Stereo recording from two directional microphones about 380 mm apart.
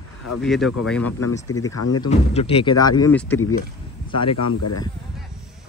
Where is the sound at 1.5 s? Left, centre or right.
Left.